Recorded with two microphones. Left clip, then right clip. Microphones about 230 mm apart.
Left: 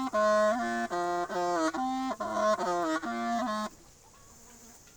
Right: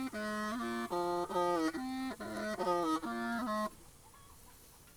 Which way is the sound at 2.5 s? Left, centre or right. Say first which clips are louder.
Left 4 dB; left.